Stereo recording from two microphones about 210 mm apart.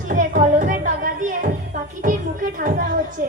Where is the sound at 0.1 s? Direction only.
40° right (ahead or behind).